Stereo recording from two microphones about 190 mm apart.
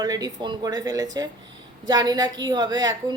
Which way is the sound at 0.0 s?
20° right (ahead or behind).